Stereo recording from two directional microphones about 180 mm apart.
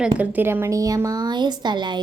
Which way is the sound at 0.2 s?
10° right (ahead or behind).